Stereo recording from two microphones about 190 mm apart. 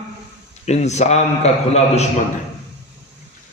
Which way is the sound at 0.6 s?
35° left (ahead or behind).